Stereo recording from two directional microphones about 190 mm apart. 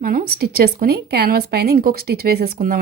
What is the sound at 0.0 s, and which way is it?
Speech, 50° right (ahead or behind).